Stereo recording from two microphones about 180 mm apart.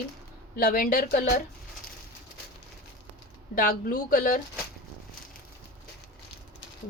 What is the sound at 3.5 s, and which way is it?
Speech, 50° left (ahead or behind).